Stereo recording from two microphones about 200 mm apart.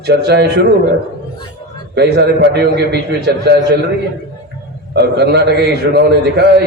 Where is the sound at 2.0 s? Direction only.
55° right (ahead or behind).